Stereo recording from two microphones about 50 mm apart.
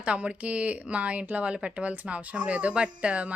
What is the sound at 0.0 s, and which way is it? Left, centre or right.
Speech, right.